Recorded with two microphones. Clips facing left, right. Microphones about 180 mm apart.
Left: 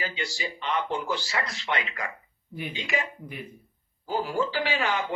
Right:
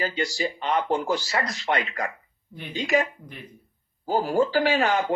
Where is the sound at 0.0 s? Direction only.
40° right (ahead or behind).